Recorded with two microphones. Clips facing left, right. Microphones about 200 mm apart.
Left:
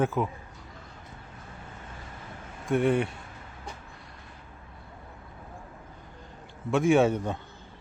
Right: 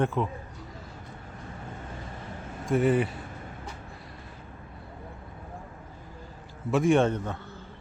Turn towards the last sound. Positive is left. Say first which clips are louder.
# left 1 dB
turn(degrees=15)  # may be behind; listen again after turning